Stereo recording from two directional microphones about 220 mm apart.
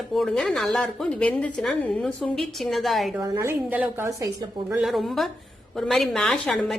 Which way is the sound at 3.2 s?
15° right (ahead or behind).